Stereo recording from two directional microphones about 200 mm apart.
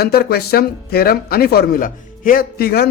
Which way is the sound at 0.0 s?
50° left (ahead or behind).